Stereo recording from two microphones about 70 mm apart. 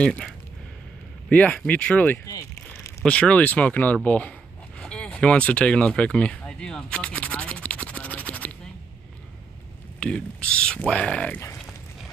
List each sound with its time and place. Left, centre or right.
0.0 s speech: centre
1.3 s speech: left
9.9 s speech: centre